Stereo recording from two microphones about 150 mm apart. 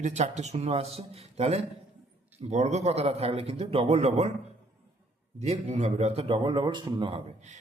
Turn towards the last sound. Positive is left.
turn(degrees=-45)  # may be behind; listen again after turning